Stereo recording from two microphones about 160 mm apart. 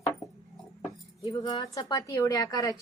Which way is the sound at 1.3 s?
25° left (ahead or behind).